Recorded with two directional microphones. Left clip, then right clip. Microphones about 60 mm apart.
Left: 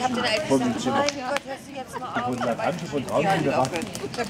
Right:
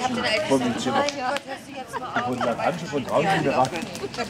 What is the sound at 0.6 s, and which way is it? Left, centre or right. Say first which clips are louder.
Speech: right 1 dB; centre.